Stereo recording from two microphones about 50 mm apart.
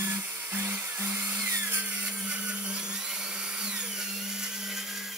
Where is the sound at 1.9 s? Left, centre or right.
Right.